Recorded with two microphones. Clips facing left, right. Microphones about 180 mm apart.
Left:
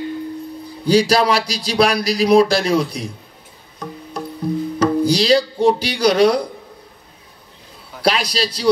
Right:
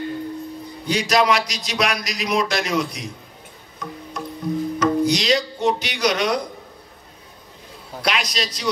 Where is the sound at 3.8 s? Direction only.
30° left (ahead or behind).